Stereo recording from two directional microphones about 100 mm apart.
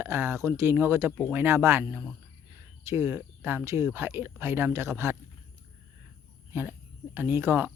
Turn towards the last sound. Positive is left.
turn(degrees=-25)  # may be behind; listen again after turning